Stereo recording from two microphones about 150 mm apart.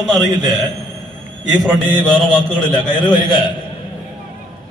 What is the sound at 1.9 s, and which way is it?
A man's voice, 30° left (ahead or behind).